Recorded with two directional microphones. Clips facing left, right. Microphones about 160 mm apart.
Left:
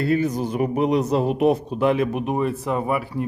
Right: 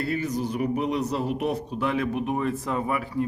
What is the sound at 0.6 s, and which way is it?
Speech, 90° left.